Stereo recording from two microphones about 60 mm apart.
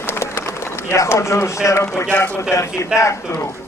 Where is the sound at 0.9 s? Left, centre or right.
Left.